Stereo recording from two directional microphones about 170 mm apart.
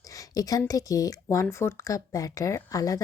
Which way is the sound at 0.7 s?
20° left (ahead or behind).